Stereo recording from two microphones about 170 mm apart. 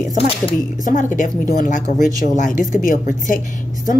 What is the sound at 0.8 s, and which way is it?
A woman's voice, 50° left (ahead or behind).